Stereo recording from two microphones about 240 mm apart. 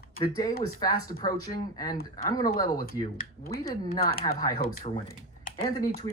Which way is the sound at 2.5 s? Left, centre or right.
Left.